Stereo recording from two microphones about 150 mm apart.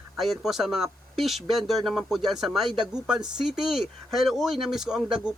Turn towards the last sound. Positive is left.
turn(degrees=-5)  # may be behind; listen again after turning